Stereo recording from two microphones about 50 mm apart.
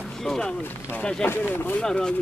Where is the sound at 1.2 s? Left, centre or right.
Left.